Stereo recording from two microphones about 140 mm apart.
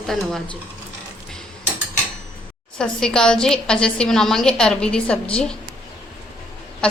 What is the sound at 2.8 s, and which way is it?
A woman's voice, 5° left (ahead or behind).